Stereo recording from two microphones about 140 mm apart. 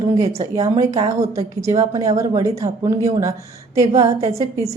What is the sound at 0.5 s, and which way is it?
A woman's voice, 25° right (ahead or behind).